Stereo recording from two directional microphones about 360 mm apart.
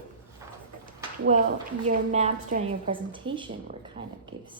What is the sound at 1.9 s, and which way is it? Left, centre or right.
A woman's voice, centre.